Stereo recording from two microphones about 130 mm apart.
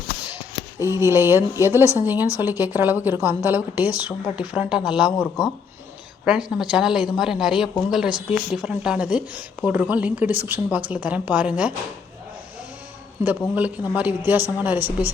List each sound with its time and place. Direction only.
0.8 s a woman's voice: 20° right (ahead or behind); by 5.1 s 5° right (ahead or behind)
6.2 s a woman's voice: 5° right (ahead or behind)
13.2 s a woman's voice: 10° right (ahead or behind)